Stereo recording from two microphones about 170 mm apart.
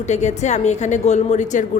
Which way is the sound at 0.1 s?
45° left (ahead or behind).